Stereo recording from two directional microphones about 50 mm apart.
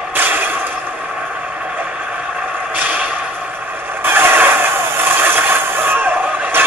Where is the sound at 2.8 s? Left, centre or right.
Right.